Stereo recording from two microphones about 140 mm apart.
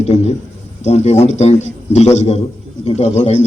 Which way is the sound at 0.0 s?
55° left (ahead or behind).